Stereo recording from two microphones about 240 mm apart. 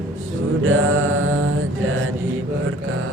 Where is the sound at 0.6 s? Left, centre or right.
Right.